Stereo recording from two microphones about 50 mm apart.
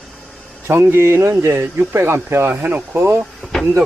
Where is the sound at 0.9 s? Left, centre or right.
Right.